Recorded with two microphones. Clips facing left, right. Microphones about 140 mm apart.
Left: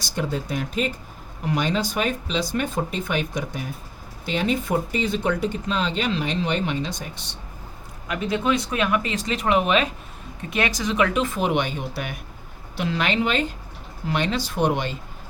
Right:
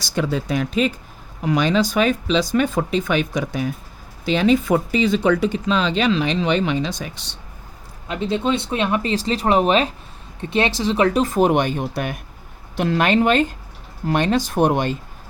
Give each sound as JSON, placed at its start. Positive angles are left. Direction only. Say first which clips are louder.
{"t": 0.0, "sound": "speech", "louder": "right 4 dB", "side_deg": -90}
{"t": 8.0, "sound": "speech", "louder": "right 2 dB", "side_deg": -25}